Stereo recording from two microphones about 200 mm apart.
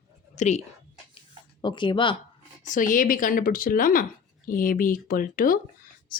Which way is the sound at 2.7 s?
40° left (ahead or behind).